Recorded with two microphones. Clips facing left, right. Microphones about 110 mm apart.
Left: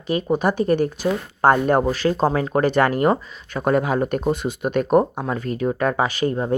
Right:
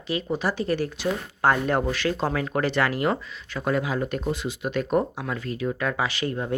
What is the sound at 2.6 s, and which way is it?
Speech, 45° left (ahead or behind).